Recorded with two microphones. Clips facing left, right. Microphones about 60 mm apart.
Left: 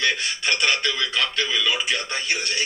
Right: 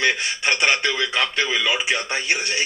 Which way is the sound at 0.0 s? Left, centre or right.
Right.